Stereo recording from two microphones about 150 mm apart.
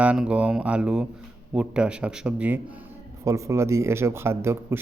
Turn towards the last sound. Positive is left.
turn(degrees=-15)  # may be behind; listen again after turning